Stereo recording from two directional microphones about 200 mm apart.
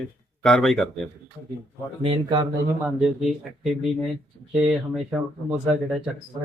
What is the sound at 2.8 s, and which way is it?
Speech, centre (ahead or behind).